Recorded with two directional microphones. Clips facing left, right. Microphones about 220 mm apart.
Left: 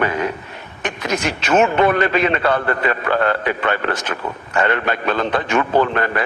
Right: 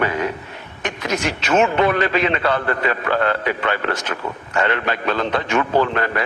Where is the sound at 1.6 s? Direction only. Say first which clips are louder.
Left 2 dB; 50° left (ahead or behind).